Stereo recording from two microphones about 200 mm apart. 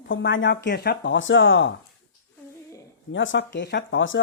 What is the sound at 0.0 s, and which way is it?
Speech, 65° left (ahead or behind).